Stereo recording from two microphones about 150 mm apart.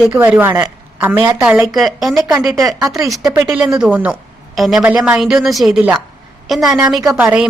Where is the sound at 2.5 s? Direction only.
20° right (ahead or behind).